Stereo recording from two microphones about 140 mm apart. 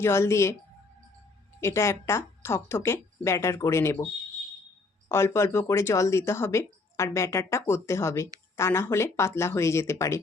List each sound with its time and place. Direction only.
0.0 s speech: 20° left (ahead or behind)
1.6 s speech: 20° left (ahead or behind)